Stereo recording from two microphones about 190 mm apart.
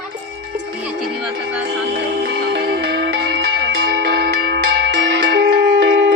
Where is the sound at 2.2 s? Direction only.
60° right (ahead or behind).